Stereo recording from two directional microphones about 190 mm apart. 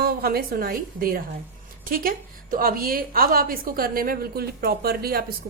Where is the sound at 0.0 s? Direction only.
55° right (ahead or behind).